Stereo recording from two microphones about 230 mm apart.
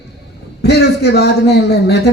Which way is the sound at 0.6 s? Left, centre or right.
Left.